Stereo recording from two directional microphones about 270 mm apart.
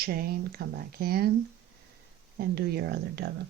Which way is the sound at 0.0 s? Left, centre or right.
Right.